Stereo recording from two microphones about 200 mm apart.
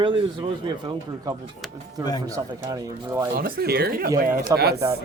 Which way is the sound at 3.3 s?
50° right (ahead or behind).